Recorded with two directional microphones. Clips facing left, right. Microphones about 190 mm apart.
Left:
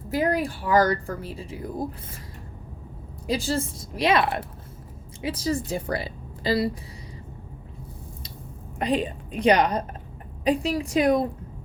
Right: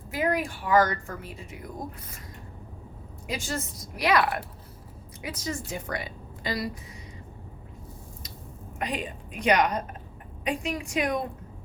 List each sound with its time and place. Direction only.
0.1 s speech: 35° left (ahead or behind)
3.2 s a woman's voice: 35° left (ahead or behind)
8.8 s speech: 30° left (ahead or behind)